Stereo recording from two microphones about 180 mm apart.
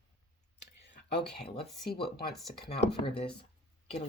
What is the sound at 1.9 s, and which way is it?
Speech, 60° left (ahead or behind).